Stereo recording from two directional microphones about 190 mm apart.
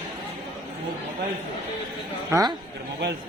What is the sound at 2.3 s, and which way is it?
Speech, 15° right (ahead or behind).